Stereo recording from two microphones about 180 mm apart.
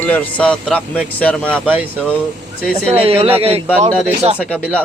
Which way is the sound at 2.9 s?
35° right (ahead or behind).